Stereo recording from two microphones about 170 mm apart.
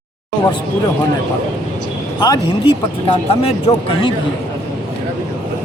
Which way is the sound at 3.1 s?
35° left (ahead or behind).